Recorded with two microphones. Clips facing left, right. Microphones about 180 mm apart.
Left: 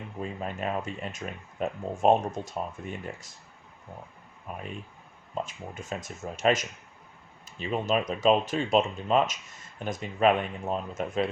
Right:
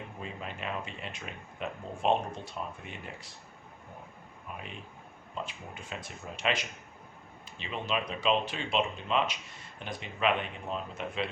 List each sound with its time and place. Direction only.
0.2 s speech: 45° left (ahead or behind)
4.5 s speech: 40° left (ahead or behind)